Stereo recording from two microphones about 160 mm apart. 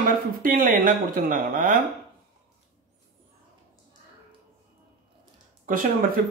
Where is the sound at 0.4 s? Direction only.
60° right (ahead or behind).